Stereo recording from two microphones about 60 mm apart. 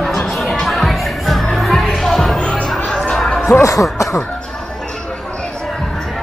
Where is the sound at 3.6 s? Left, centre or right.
Left.